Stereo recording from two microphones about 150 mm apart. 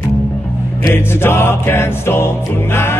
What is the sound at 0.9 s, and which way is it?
Music, 15° left (ahead or behind).